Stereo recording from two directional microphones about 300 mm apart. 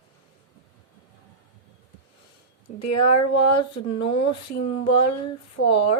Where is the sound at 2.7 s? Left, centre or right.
Left.